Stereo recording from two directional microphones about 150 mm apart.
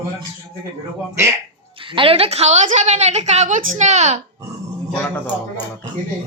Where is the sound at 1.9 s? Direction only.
35° right (ahead or behind).